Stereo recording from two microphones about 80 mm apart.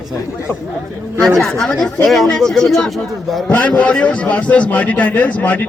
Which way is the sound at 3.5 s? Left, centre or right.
Centre.